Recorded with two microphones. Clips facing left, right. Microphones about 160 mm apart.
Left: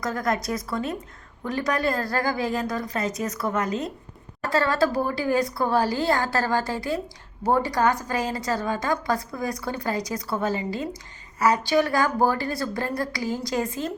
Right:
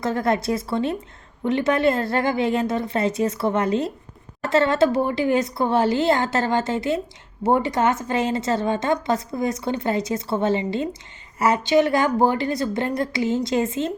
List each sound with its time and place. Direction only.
0.0 s a woman's voice: 25° right (ahead or behind)